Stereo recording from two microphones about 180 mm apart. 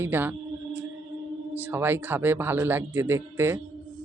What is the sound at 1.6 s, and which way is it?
Speech, 10° right (ahead or behind).